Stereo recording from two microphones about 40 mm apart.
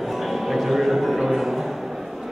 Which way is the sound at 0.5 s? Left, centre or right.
Centre.